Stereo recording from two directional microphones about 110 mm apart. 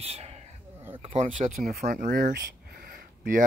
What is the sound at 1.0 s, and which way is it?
Speech, 90° right.